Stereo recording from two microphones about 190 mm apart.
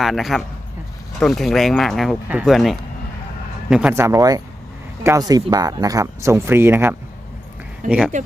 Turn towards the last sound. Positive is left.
turn(degrees=-40)  # may be behind; listen again after turning